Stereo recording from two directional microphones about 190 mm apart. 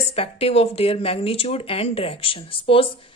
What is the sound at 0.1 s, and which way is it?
Speech, 30° left (ahead or behind).